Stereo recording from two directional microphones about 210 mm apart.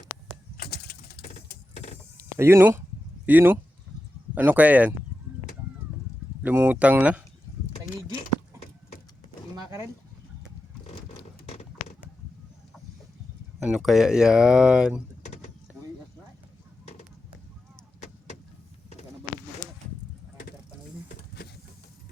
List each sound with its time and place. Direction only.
0.5 s a sound: 50° left (ahead or behind)
1.7 s power windows: 30° left (ahead or behind)
2.1 s speech: 15° right (ahead or behind)
6.4 s speech: 10° right (ahead or behind)
9.6 s speech: 15° right (ahead or behind)
10.8 s a sound: 30° left (ahead or behind)
13.6 s speech: centre (ahead or behind)